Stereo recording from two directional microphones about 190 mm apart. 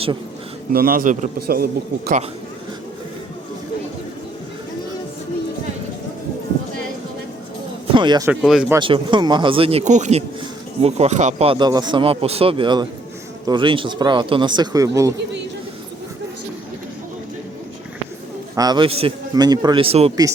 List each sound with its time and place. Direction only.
0.7 s a man's voice: 50° right (ahead or behind)
7.9 s speech: 25° right (ahead or behind)
8.3 s speech: centre (ahead or behind)
8.8 s speech: 25° right (ahead or behind)
18.5 s speech: 20° right (ahead or behind)